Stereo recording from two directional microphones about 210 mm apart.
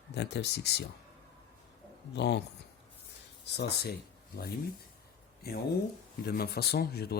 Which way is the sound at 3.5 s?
55° left (ahead or behind).